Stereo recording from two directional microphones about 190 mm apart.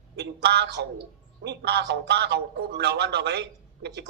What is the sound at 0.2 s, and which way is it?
A man's voice, 60° right (ahead or behind).